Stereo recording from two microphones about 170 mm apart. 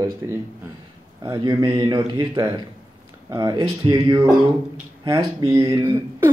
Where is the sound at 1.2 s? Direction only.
25° right (ahead or behind).